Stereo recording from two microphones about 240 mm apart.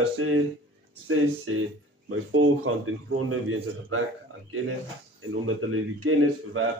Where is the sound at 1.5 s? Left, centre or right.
Right.